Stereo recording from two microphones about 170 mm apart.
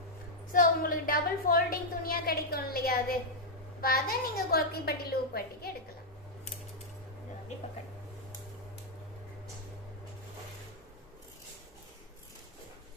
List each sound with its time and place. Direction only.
0.5 s a woman's voice: 55° left (ahead or behind)